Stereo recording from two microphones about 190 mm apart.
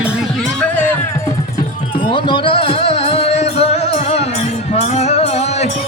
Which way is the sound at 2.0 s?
25° left (ahead or behind).